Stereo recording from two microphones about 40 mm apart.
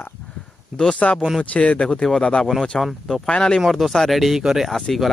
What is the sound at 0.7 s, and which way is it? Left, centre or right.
Speech, left.